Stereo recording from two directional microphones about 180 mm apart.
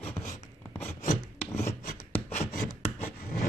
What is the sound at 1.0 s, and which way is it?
Filing, 40° left (ahead or behind).